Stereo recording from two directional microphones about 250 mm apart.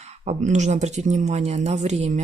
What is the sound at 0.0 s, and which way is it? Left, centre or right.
Speech, right.